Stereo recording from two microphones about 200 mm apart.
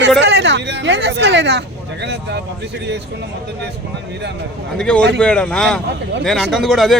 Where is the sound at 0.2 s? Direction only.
60° right (ahead or behind).